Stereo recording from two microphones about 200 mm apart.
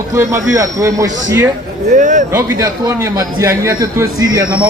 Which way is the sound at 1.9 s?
40° right (ahead or behind).